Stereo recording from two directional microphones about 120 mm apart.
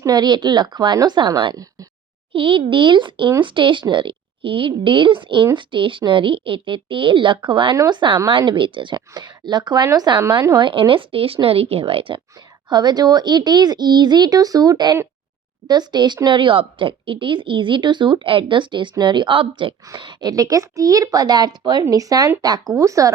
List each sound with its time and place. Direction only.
0.0 s speech: 35° right (ahead or behind)
10.6 s speech: 45° right (ahead or behind)
12.6 s speech: 35° right (ahead or behind)